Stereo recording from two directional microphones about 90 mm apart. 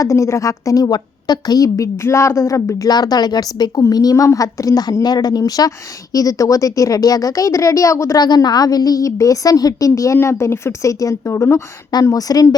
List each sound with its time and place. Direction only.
0.0 s a woman's voice: 35° left (ahead or behind)
8.2 s a woman's voice: 50° left (ahead or behind); by 11.6 s 30° left (ahead or behind)
12.0 s speech: 45° left (ahead or behind)